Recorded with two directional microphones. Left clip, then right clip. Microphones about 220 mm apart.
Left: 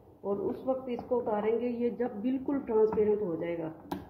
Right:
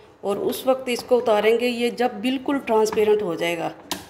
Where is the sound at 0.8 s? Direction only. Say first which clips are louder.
Right 12 dB; 45° right (ahead or behind).